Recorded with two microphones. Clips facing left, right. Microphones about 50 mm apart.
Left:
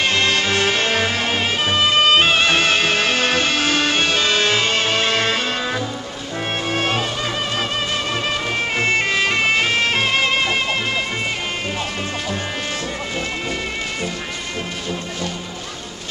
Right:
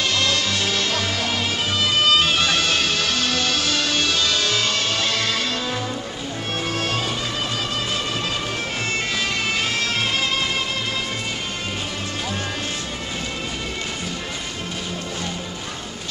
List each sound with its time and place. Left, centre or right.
0.0 s music: left
8.7 s music: left